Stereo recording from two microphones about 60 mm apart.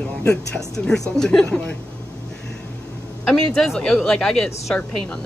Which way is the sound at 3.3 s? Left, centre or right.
Centre.